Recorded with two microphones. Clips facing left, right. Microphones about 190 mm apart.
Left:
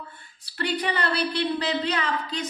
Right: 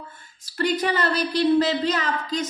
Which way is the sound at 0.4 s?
45° right (ahead or behind).